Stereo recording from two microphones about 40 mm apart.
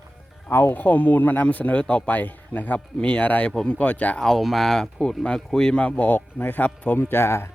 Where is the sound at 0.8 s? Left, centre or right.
Left.